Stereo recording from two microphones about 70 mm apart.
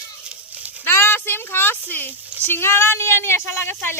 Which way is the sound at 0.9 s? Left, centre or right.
Left.